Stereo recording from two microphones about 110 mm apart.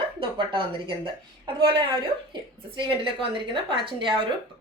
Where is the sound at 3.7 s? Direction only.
50° right (ahead or behind).